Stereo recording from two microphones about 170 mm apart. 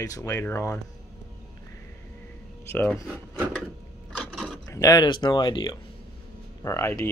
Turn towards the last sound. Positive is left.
turn(degrees=15)  # may be behind; listen again after turning